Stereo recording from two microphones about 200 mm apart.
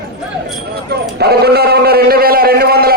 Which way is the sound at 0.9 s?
55° right (ahead or behind).